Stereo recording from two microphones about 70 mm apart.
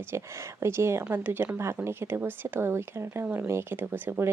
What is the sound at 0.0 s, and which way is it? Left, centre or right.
Speech, right.